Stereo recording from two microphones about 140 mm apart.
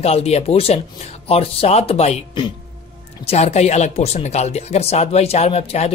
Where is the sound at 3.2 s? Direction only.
50° left (ahead or behind).